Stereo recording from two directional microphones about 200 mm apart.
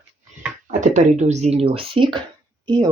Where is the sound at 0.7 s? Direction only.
35° right (ahead or behind).